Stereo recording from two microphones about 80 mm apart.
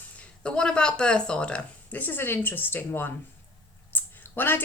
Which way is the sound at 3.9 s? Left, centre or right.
Left.